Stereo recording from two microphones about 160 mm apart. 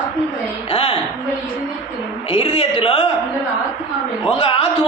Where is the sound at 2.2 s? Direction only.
35° left (ahead or behind).